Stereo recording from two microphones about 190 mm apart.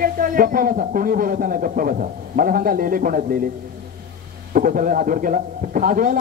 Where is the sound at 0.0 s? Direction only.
50° right (ahead or behind).